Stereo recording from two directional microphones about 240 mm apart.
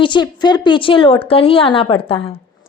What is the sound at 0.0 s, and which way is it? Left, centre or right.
A woman's voice, centre.